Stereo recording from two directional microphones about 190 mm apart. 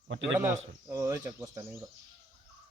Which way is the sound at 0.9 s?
15° right (ahead or behind).